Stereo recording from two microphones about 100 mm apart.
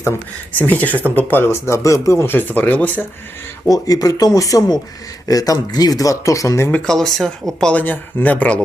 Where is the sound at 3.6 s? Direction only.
35° left (ahead or behind).